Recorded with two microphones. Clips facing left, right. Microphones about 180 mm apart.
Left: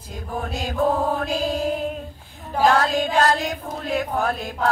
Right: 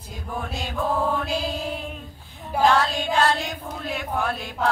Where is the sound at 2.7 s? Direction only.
40° left (ahead or behind).